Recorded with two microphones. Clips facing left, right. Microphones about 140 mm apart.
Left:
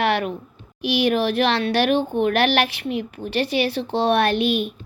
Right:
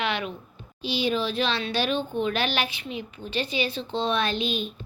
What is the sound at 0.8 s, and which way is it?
Speech, 80° left.